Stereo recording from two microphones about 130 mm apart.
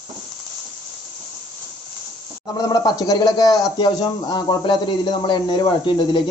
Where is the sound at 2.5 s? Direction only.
35° left (ahead or behind).